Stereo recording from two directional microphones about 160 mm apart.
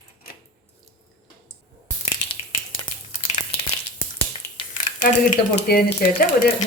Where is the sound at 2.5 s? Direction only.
40° left (ahead or behind).